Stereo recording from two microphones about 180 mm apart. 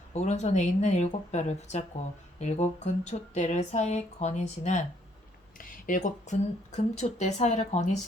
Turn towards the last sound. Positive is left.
turn(degrees=40)  # may be behind; listen again after turning